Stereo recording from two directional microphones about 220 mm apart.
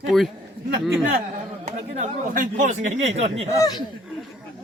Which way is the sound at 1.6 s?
35° right (ahead or behind).